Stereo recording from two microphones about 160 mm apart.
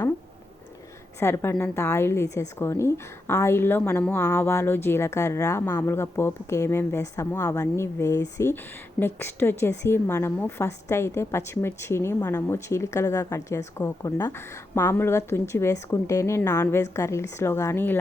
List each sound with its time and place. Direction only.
1.2 s a woman's voice: 15° left (ahead or behind)